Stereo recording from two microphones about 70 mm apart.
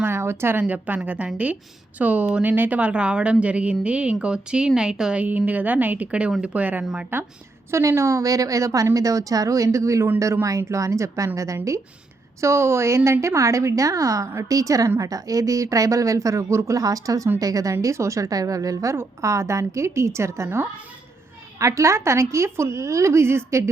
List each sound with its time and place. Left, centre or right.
0.0 s a sound: right
0.7 s a woman's voice: right
5.2 s a woman's voice: right
6.8 s a woman's voice: centre
7.7 s a woman's voice: right